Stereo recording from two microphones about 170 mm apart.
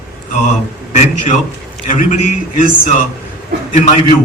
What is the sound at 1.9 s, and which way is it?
A man's voice, 45° left (ahead or behind).